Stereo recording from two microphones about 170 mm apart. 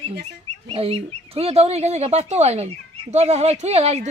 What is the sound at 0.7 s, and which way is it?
Speech, 35° right (ahead or behind).